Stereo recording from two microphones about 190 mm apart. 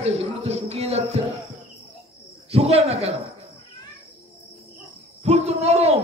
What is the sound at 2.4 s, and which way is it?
Speech, 30° right (ahead or behind).